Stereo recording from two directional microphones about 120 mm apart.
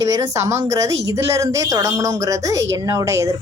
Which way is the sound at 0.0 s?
30° right (ahead or behind).